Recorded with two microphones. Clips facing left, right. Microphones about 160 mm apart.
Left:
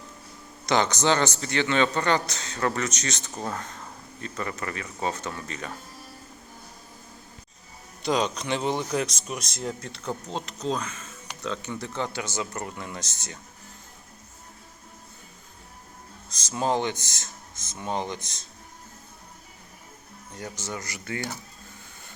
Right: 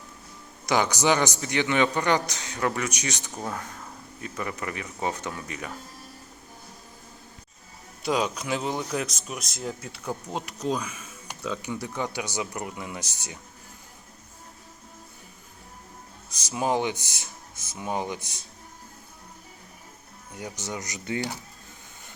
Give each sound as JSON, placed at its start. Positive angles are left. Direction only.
{"t": 0.6, "sound": "speech", "side_deg": -10}
{"t": 8.0, "sound": "speech", "side_deg": -5}
{"t": 16.3, "sound": "speech", "side_deg": -10}
{"t": 20.3, "sound": "speech", "side_deg": -15}